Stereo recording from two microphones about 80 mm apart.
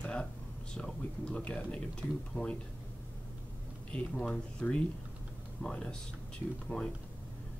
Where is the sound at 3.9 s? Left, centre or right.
Centre.